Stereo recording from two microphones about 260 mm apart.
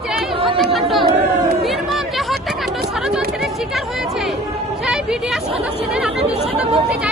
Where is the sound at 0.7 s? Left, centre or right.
Centre.